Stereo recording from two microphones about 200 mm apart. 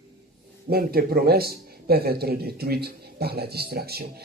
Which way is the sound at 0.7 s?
50° right (ahead or behind).